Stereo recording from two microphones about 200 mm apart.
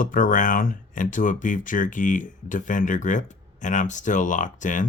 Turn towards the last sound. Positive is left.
turn(degrees=40)  # may be behind; listen again after turning